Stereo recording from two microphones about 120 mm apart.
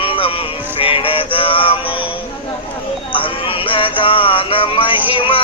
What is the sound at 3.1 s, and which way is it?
Music, 45° left (ahead or behind).